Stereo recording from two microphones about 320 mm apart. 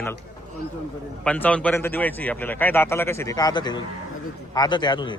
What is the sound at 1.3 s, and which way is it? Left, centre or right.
A man's voice, centre.